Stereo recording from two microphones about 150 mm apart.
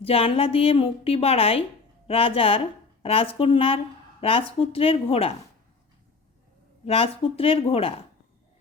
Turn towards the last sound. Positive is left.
turn(degrees=40)  # may be behind; listen again after turning